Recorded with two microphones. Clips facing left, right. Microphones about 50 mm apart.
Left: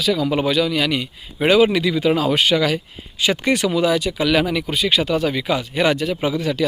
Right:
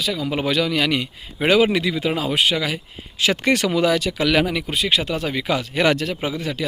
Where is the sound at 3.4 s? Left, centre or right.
Right.